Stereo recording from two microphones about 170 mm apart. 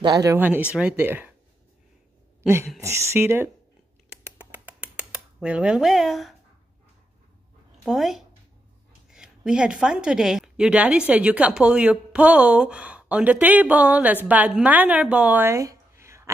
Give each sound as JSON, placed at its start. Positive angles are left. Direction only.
{"t": 0.0, "sound": "speech", "side_deg": -20}
{"t": 2.8, "sound": "speech", "side_deg": -15}
{"t": 4.1, "sound": "a sound", "side_deg": -10}
{"t": 7.7, "sound": "speech", "side_deg": 0}